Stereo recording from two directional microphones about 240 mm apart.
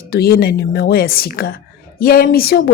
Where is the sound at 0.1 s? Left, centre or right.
Left.